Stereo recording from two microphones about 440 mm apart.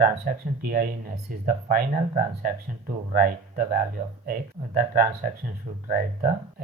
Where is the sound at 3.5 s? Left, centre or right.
Centre.